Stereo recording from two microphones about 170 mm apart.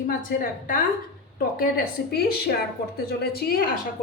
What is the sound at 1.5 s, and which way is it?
A woman's voice, 65° left (ahead or behind).